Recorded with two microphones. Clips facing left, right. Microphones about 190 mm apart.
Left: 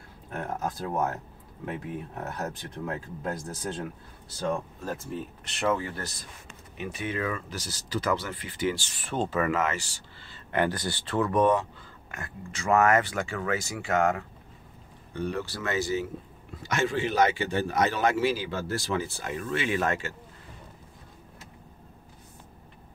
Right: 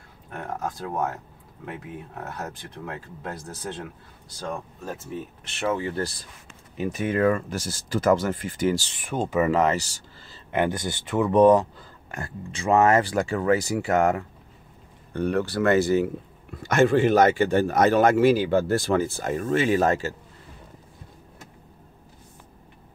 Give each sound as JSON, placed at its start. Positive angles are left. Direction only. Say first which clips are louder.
{"t": 0.4, "sound": "speech", "louder": "right 1 dB", "side_deg": 5}
{"t": 2.8, "sound": "speech", "louder": "left 2 dB", "side_deg": 0}
{"t": 4.8, "sound": "speech", "louder": "even", "side_deg": 0}
{"t": 5.9, "sound": "speech", "louder": "right 9 dB", "side_deg": -35}
{"t": 6.8, "sound": "speech", "louder": "right 9 dB", "side_deg": -45}
{"t": 8.9, "sound": "speech", "louder": "right 3 dB", "side_deg": -10}
{"t": 9.5, "sound": "speech", "louder": "right 6 dB", "side_deg": -35}
{"t": 10.5, "sound": "speech", "louder": "right 3 dB", "side_deg": -20}
{"t": 11.3, "sound": "speech", "louder": "right 8 dB", "side_deg": -35}
{"t": 15.1, "sound": "speech", "louder": "right 8 dB", "side_deg": -60}